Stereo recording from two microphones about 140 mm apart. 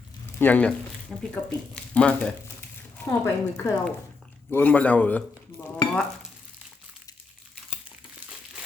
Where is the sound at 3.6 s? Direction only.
25° left (ahead or behind).